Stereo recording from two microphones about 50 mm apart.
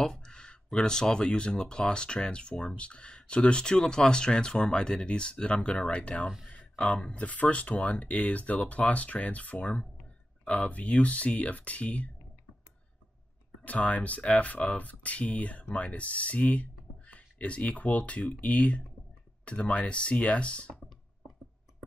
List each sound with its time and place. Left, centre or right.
0.0 s a sound: centre
0.7 s speech: centre; by 12.1 s left
13.7 s speech: left